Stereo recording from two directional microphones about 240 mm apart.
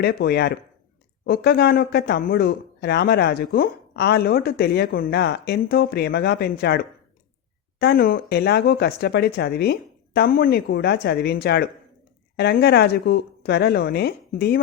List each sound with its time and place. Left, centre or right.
0.0 s speech: left